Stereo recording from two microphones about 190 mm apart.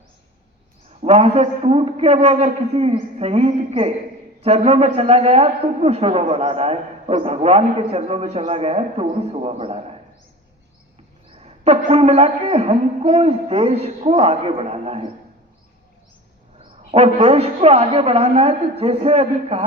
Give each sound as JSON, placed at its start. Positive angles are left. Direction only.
{"t": 1.0, "sound": "a man's voice", "side_deg": -30}
{"t": 11.3, "sound": "a sound", "side_deg": -30}
{"t": 11.9, "sound": "a man's voice", "side_deg": -30}
{"t": 16.6, "sound": "a man's voice", "side_deg": -30}